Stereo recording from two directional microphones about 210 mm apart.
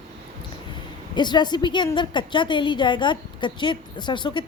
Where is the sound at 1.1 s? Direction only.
20° left (ahead or behind).